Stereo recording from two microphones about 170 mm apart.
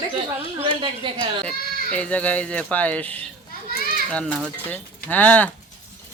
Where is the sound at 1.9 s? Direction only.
10° left (ahead or behind).